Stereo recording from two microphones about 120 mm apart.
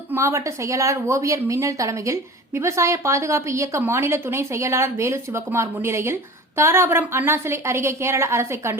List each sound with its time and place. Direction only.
0.1 s speech: 25° right (ahead or behind)